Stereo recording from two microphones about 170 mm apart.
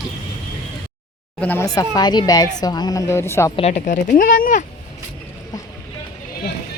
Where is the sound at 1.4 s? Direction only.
10° left (ahead or behind).